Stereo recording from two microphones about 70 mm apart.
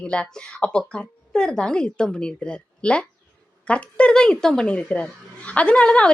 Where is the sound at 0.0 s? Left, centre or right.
Centre.